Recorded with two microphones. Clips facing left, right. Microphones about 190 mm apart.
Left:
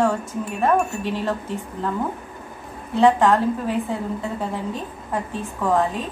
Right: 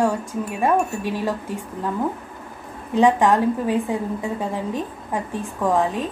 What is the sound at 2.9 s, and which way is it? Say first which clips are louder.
A woman's voice: even; 15° right (ahead or behind).